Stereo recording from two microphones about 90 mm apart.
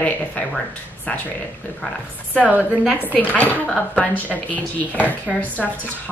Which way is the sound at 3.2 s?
20° left (ahead or behind).